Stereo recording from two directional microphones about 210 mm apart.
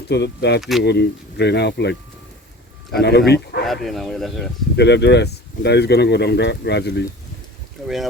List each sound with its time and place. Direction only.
0.1 s speech: 55° left (ahead or behind)
3.0 s speech: 50° left (ahead or behind)
3.7 s speech: centre (ahead or behind)
4.8 s speech: 55° left (ahead or behind)